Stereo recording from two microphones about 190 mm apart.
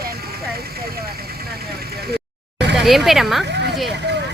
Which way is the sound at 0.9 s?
55° right (ahead or behind).